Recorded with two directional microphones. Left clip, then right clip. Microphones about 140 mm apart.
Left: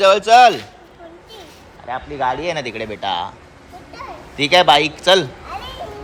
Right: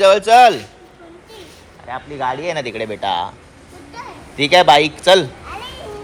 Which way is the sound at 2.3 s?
30° left (ahead or behind).